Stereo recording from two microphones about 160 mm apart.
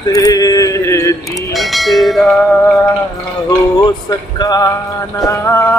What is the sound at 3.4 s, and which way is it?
Music, 25° left (ahead or behind).